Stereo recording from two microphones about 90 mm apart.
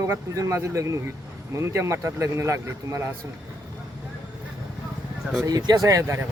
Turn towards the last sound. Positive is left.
turn(degrees=-35)  # may be behind; listen again after turning